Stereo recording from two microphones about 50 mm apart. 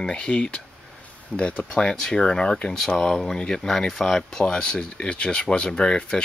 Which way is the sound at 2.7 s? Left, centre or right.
Centre.